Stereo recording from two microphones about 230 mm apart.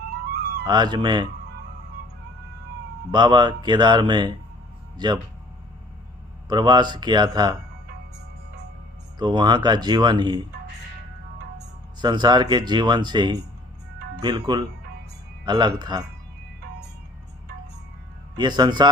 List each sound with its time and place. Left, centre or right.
0.6 s speech: centre
3.1 s speech: centre
6.5 s speech: centre
9.1 s speech: centre
11.5 s speech: centre
18.3 s speech: centre